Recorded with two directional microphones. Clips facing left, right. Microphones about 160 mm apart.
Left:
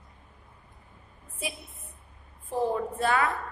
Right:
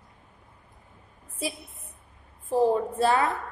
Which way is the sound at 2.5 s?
35° right (ahead or behind).